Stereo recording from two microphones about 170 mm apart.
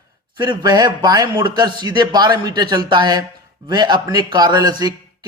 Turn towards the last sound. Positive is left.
turn(degrees=-25)  # may be behind; listen again after turning